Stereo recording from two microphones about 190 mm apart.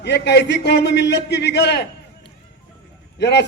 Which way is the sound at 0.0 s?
60° left (ahead or behind).